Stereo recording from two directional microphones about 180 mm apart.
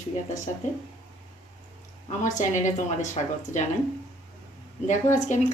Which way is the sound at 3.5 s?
40° left (ahead or behind).